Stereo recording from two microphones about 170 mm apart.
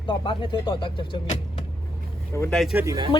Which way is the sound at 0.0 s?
30° left (ahead or behind).